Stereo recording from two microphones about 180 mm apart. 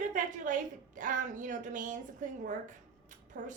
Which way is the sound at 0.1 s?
45° right (ahead or behind).